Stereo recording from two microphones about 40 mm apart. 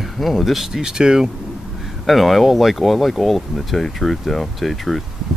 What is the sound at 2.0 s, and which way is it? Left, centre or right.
Speech, centre.